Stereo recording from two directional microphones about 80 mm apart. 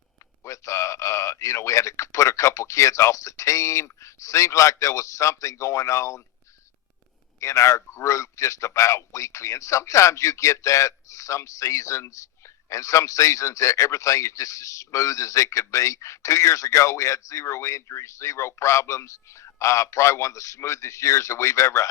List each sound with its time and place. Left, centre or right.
0.4 s a man's voice: left
7.3 s a man's voice: left